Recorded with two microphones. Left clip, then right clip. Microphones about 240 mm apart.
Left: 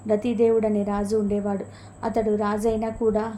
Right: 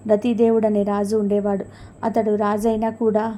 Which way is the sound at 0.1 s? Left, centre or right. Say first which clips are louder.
Right 3 dB; centre.